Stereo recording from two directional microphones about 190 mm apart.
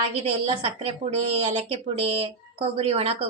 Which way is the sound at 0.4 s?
30° right (ahead or behind).